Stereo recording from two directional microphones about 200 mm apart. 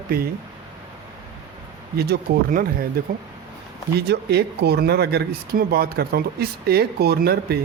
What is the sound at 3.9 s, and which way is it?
Speech, 55° right (ahead or behind).